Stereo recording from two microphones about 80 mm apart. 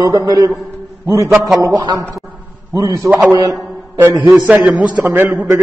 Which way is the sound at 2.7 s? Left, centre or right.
Right.